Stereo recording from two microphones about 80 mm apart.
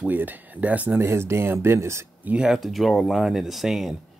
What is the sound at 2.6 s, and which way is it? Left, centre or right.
Speech, centre.